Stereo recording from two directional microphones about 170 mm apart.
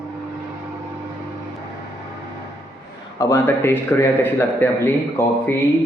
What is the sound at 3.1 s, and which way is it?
A man's voice, 20° left (ahead or behind).